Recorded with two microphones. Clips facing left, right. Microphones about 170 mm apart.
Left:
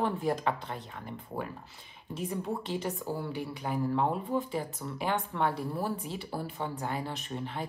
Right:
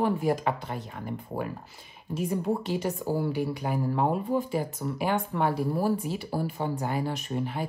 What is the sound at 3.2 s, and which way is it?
Speech, 5° right (ahead or behind).